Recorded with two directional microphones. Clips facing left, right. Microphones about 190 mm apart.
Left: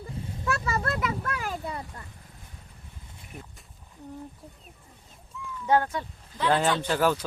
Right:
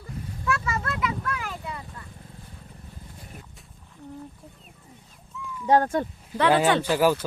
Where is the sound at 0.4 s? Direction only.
35° left (ahead or behind).